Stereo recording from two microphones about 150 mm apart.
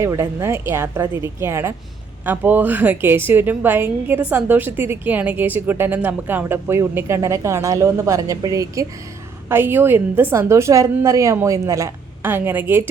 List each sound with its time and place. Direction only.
0.0 s a woman's voice: 20° right (ahead or behind)